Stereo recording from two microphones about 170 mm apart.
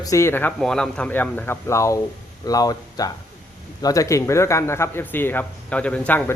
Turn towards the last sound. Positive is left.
turn(degrees=10)  # may be behind; listen again after turning